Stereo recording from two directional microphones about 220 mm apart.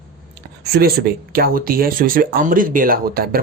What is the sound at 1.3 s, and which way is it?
Speech, 45° right (ahead or behind).